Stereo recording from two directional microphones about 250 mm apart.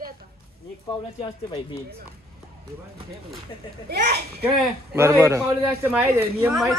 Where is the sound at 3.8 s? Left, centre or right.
Right.